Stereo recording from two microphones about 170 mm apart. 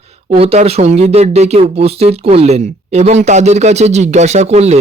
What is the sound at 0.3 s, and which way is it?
Speech, 35° right (ahead or behind).